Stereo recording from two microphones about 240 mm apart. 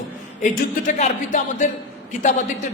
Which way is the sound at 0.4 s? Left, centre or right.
Left.